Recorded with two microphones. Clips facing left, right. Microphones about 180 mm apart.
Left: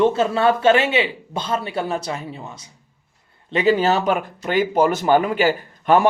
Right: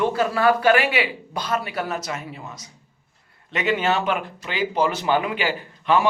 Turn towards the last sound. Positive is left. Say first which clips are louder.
# left 4 dB
turn(degrees=45)  # may be behind; listen again after turning